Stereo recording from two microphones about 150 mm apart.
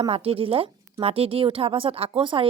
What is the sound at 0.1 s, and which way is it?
A woman's voice, 40° right (ahead or behind).